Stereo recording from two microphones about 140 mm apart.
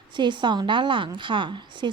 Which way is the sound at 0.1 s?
35° right (ahead or behind).